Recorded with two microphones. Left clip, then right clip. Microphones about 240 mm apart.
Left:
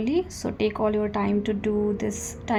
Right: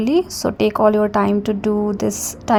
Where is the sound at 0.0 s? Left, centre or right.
Right.